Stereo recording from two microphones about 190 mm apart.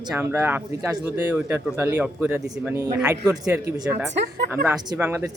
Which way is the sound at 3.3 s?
5° right (ahead or behind).